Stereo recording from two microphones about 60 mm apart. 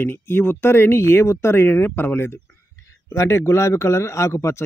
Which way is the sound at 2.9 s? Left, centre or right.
Left.